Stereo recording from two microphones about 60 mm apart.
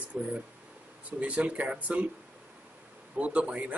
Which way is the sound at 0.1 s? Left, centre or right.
Right.